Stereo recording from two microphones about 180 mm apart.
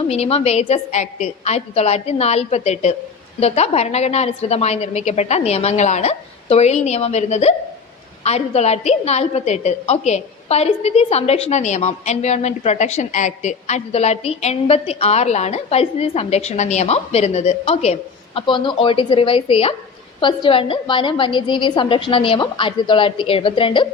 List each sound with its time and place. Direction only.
0.1 s a woman's voice: 35° left (ahead or behind)